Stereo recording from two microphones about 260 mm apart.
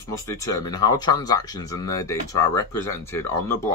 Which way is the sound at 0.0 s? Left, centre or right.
Centre.